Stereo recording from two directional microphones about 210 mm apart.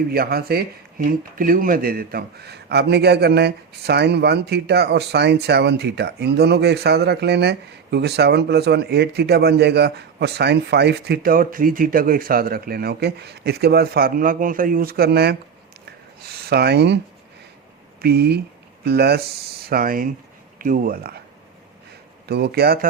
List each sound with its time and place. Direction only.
0.1 s speech: 45° right (ahead or behind)
18.0 s speech: 50° right (ahead or behind)
22.3 s speech: 50° right (ahead or behind)